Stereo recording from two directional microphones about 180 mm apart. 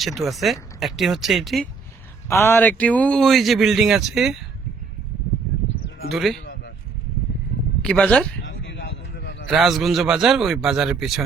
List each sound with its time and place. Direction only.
0.0 s speech: centre (ahead or behind)
2.3 s speech: 15° left (ahead or behind)
6.1 s speech: centre (ahead or behind)
7.8 s speech: 5° left (ahead or behind)
8.4 s a sound: 90° left; by 9.5 s 70° left (ahead or behind)
9.5 s speech: centre (ahead or behind)